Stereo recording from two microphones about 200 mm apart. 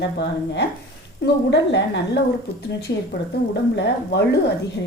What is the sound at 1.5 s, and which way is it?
Speech, 60° left (ahead or behind).